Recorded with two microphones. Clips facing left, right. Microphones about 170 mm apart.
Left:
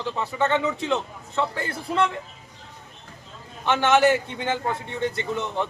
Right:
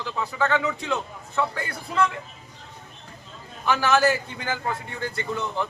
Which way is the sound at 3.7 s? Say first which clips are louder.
Left 2 dB; 25° left (ahead or behind).